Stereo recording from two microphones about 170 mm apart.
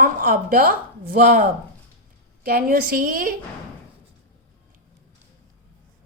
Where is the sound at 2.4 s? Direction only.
60° right (ahead or behind).